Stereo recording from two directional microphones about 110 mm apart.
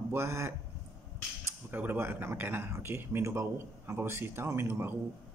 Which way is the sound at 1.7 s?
15° right (ahead or behind).